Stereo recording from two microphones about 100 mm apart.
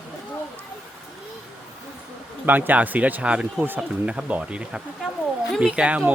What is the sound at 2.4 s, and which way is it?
Speech, 20° right (ahead or behind).